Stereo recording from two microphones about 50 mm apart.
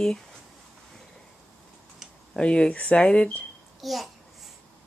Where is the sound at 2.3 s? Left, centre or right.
Centre.